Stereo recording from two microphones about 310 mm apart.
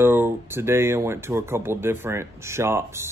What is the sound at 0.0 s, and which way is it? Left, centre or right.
Speech, centre.